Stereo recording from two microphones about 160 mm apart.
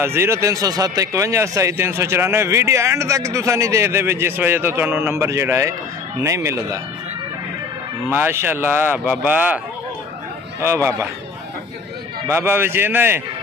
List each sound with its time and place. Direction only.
0.0 s speech: 15° right (ahead or behind)
8.1 s speech: 15° right (ahead or behind)
10.6 s speech: 15° right (ahead or behind)
12.3 s speech: 15° right (ahead or behind)